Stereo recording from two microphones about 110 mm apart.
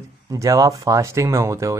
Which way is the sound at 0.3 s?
30° right (ahead or behind).